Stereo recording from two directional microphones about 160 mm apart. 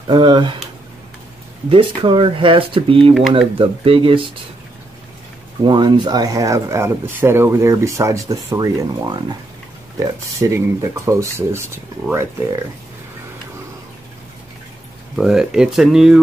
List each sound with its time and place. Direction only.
0.0 s speech: 30° right (ahead or behind)
1.7 s speech: 35° right (ahead or behind)
3.2 s speech: centre (ahead or behind)
3.5 s speech: 35° right (ahead or behind)
5.7 s speech: 25° right (ahead or behind)
15.1 s speech: 5° right (ahead or behind)